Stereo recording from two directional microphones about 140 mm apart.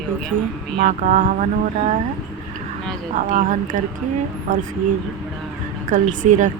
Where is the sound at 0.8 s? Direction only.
65° right (ahead or behind).